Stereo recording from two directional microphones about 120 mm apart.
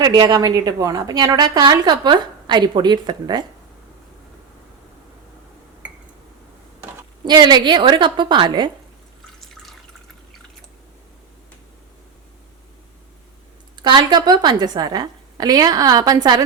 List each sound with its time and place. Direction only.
0.0 s a woman's voice: 35° right (ahead or behind)
7.3 s a woman's voice: 40° right (ahead or behind)
9.2 s drip: centre (ahead or behind)
13.7 s a woman's voice: 40° right (ahead or behind)